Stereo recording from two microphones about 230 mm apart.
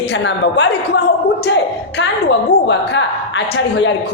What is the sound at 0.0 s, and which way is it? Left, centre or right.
A woman's voice, left.